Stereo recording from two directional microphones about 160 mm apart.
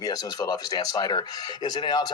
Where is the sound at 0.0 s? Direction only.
25° left (ahead or behind).